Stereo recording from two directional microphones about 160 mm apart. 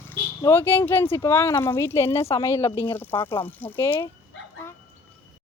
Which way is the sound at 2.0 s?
35° left (ahead or behind).